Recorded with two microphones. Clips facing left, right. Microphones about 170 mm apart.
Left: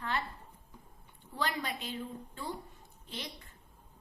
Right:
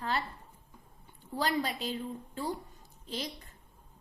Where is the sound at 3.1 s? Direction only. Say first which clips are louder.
Right 6 dB; 35° right (ahead or behind).